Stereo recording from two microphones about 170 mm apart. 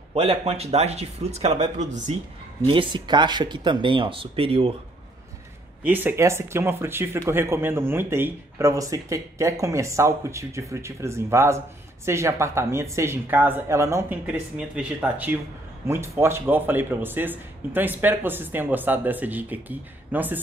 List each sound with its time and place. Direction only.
0.1 s speech: 35° right (ahead or behind)
2.6 s speech: 30° right (ahead or behind)
5.9 s speech: 10° right (ahead or behind)